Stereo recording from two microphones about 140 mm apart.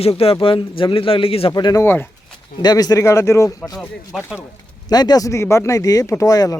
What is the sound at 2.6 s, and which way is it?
Speech, 30° left (ahead or behind).